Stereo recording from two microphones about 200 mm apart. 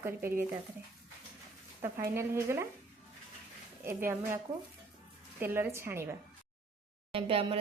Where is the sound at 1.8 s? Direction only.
15° right (ahead or behind).